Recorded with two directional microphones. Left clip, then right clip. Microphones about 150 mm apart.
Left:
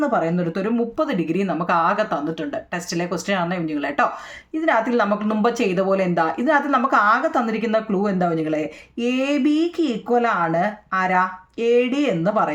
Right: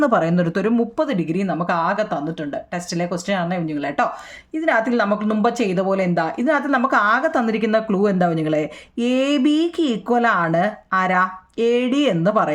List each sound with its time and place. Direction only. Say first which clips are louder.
0.0 s a woman's voice: right 3 dB; 55° right (ahead or behind)
1.0 s a woman's voice: even; 30° right (ahead or behind)